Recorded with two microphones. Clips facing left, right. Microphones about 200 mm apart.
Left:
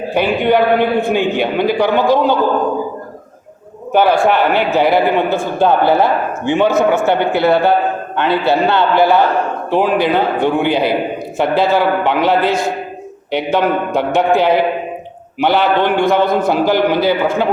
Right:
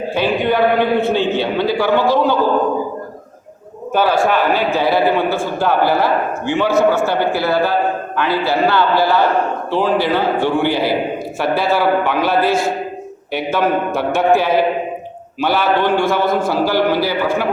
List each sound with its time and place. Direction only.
0.1 s a man's voice: 15° left (ahead or behind)
3.9 s a man's voice: 15° left (ahead or behind)